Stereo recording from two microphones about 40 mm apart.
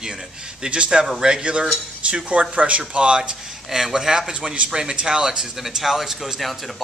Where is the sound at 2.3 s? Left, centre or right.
Right.